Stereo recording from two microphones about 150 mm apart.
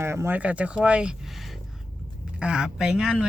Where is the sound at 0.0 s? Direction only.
15° right (ahead or behind).